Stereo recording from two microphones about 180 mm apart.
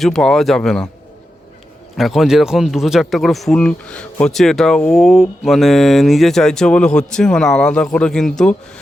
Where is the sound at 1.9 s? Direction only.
Centre (ahead or behind).